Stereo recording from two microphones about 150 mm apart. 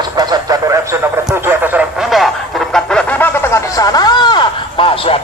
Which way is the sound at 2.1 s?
Centre (ahead or behind).